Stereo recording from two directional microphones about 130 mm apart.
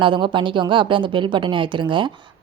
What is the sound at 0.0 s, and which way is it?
Speech, 40° right (ahead or behind).